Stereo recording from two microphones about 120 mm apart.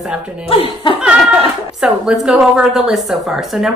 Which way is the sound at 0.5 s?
50° left (ahead or behind).